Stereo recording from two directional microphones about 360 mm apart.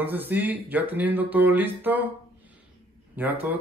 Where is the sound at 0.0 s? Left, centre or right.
Centre.